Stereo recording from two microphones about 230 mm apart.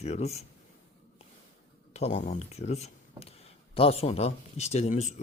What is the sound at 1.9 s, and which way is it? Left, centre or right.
Speech, left.